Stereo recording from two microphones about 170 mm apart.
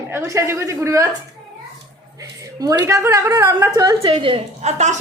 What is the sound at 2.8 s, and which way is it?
Speech, 15° right (ahead or behind).